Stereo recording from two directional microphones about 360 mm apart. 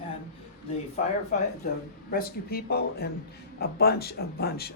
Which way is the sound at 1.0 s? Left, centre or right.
Centre.